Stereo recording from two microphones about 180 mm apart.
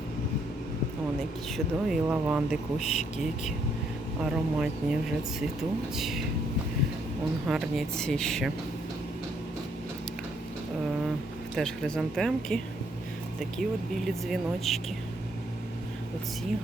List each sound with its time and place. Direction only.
1.5 s speech: 5° right (ahead or behind)
2.8 s speech: 40° left (ahead or behind)
4.3 s speech: 5° right (ahead or behind)
6.0 s speech: centre (ahead or behind)
7.4 s speech: 5° right (ahead or behind)
11.5 s speech: centre (ahead or behind)